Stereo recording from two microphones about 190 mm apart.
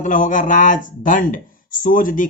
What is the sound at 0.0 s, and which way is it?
Speech, 45° left (ahead or behind).